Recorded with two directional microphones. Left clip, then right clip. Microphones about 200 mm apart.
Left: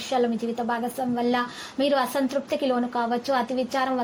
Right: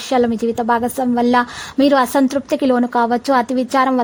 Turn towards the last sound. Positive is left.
turn(degrees=-45)  # may be behind; listen again after turning